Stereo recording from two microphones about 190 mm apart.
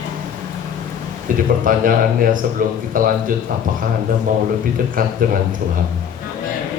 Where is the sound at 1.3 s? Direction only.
45° right (ahead or behind).